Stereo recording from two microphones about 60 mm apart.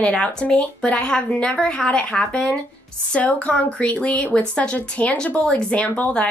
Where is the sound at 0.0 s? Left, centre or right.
Centre.